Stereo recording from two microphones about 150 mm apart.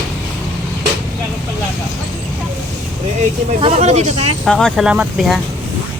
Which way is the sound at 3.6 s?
50° right (ahead or behind).